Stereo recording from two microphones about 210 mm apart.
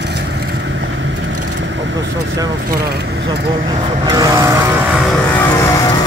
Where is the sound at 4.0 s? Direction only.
20° right (ahead or behind).